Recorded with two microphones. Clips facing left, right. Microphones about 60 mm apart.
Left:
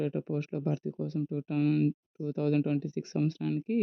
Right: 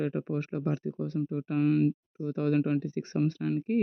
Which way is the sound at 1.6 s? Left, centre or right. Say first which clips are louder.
Right 2 dB; centre.